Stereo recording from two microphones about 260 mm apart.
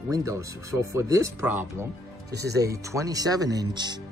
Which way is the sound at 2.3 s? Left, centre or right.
Right.